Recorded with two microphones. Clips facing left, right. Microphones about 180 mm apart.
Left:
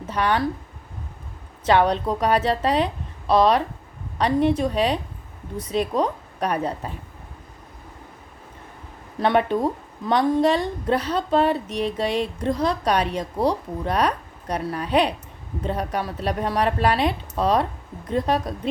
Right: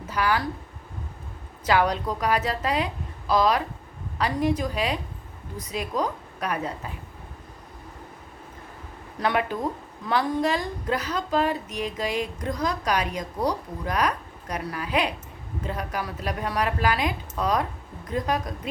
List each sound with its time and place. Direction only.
0.1 s speech: 30° left (ahead or behind)
1.6 s speech: 30° left (ahead or behind)
9.2 s speech: 30° left (ahead or behind)